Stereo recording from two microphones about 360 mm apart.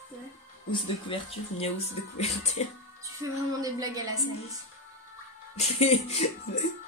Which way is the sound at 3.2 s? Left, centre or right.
Centre.